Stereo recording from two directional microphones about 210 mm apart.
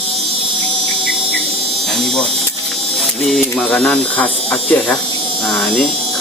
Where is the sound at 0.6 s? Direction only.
25° right (ahead or behind).